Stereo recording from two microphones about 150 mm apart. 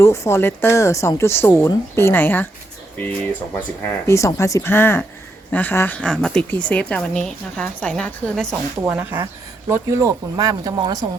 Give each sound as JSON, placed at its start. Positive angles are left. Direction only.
{"t": 0.0, "sound": "a woman's voice", "side_deg": 15}
{"t": 4.0, "sound": "a woman's voice", "side_deg": 20}
{"t": 8.8, "sound": "speech", "side_deg": -15}